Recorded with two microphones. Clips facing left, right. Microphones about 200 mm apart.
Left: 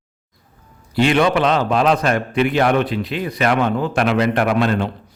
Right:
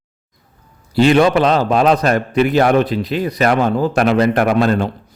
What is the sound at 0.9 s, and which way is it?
A man's voice, 35° right (ahead or behind).